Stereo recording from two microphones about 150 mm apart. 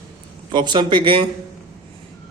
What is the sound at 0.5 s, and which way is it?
Speech, 30° right (ahead or behind).